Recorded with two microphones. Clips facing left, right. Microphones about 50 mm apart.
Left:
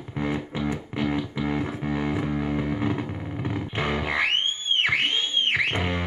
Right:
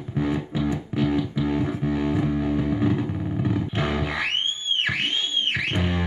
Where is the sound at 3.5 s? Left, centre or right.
Centre.